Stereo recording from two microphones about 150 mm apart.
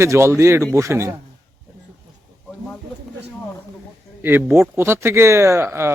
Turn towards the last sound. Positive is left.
turn(degrees=-15)  # may be behind; listen again after turning